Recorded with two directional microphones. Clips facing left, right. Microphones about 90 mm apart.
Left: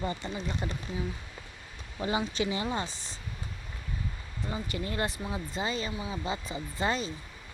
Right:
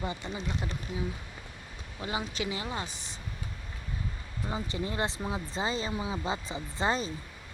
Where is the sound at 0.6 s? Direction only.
Centre (ahead or behind).